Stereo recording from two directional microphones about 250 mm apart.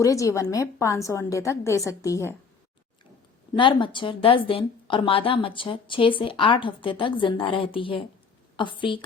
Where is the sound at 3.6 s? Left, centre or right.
Centre.